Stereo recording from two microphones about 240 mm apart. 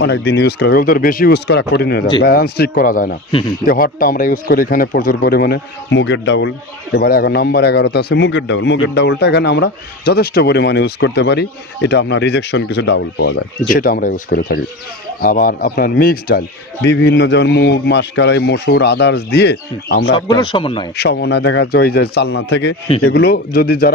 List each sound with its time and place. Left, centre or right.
0.0 s speech: left
20.2 s speech: centre
20.9 s speech: left